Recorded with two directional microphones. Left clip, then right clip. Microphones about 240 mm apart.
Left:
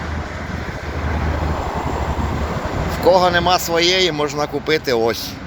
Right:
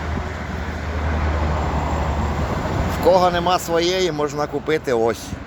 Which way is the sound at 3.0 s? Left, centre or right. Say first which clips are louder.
Left 2 dB; centre.